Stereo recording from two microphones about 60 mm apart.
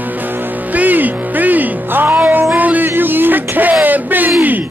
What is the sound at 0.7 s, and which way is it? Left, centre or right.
Music, right.